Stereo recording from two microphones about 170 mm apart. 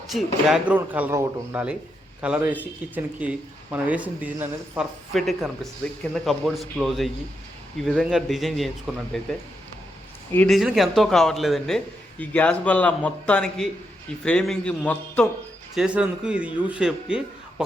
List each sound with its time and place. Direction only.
0.1 s speech: centre (ahead or behind)
5.1 s speech: centre (ahead or behind)
10.3 s a man's voice: 5° left (ahead or behind)
15.7 s speech: 5° right (ahead or behind)